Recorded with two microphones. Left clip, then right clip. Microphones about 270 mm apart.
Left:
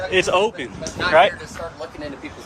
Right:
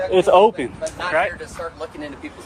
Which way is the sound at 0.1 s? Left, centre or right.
Centre.